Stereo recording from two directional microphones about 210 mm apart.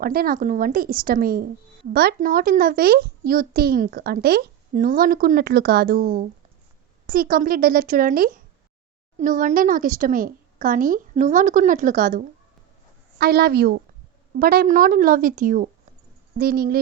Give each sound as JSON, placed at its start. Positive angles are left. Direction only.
{"t": 0.0, "sound": "a child's voice", "side_deg": -45}